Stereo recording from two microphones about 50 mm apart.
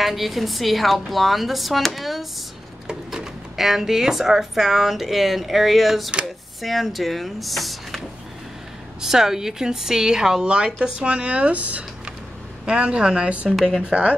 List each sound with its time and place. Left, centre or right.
0.0 s speech: centre
9.0 s a woman's voice: centre
13.5 s speech: centre
13.8 s a man's voice: right